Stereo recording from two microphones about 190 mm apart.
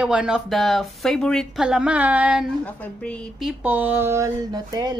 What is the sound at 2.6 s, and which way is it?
Speech, 5° left (ahead or behind).